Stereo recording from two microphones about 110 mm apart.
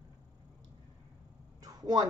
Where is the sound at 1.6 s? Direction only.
35° right (ahead or behind).